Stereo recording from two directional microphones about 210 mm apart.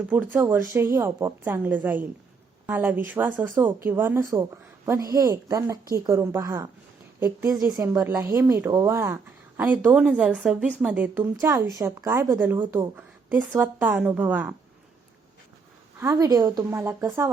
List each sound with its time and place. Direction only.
0.3 s speech: 10° right (ahead or behind)
16.0 s speech: 15° right (ahead or behind)